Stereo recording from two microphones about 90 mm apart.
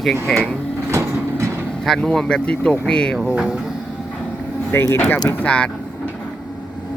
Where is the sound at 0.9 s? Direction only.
35° right (ahead or behind).